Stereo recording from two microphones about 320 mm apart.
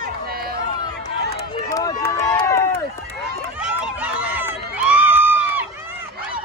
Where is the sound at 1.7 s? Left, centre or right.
Centre.